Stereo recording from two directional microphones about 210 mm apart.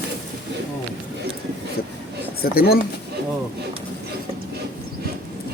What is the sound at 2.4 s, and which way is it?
Speech, 45° left (ahead or behind).